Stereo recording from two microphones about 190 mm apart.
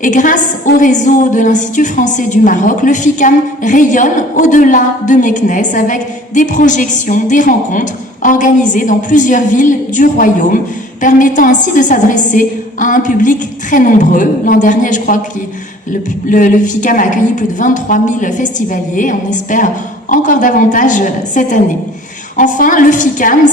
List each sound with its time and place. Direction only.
0.0 s a woman's voice: 45° left (ahead or behind)